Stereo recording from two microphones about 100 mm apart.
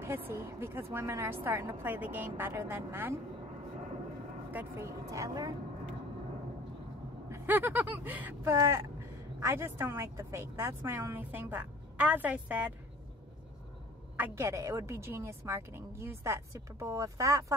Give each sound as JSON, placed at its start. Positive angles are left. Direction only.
{"t": 0.0, "sound": "a woman's voice", "side_deg": -25}
{"t": 4.5, "sound": "speech", "side_deg": -20}
{"t": 7.2, "sound": "speech", "side_deg": -20}
{"t": 8.5, "sound": "a woman's voice", "side_deg": -30}
{"t": 14.1, "sound": "a woman's voice", "side_deg": -25}